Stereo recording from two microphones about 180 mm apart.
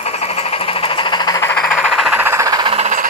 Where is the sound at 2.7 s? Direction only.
40° right (ahead or behind).